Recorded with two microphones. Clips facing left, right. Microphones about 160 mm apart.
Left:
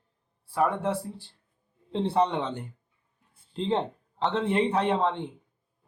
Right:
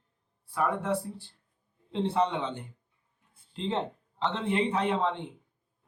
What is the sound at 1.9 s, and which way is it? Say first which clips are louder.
A man's voice: left 2 dB; 40° left (ahead or behind).